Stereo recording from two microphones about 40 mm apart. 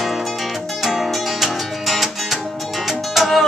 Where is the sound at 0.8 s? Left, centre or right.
Centre.